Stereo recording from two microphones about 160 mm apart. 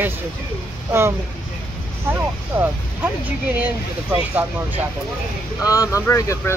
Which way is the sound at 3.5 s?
10° right (ahead or behind).